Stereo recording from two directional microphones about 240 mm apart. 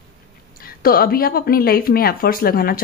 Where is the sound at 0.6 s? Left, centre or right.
Left.